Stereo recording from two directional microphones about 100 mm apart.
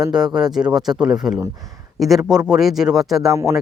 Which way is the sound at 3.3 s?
30° right (ahead or behind).